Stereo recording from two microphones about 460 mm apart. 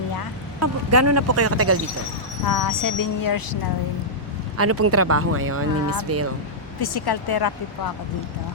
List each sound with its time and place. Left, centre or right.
0.6 s speech: right
2.5 s speech: left
4.5 s speech: right
6.7 s speech: left